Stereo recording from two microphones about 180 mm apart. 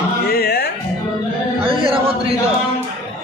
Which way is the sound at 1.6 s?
30° right (ahead or behind).